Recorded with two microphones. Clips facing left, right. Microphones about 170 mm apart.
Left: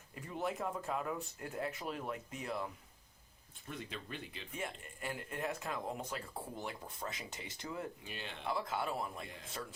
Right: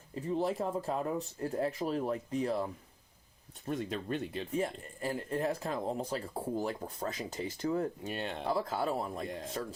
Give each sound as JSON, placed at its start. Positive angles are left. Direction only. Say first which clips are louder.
{"t": 0.1, "sound": "speech", "louder": "right 7 dB", "side_deg": -30}